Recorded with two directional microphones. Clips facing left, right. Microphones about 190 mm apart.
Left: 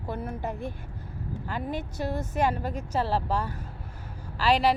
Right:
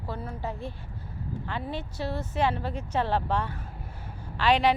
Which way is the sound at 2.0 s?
50° left (ahead or behind).